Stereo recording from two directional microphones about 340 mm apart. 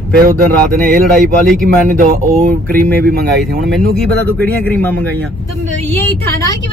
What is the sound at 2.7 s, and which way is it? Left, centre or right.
Speech, right.